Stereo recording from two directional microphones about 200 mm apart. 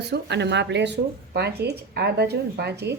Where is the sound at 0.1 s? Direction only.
60° right (ahead or behind).